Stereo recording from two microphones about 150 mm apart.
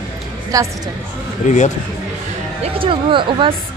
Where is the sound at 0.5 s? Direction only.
25° right (ahead or behind).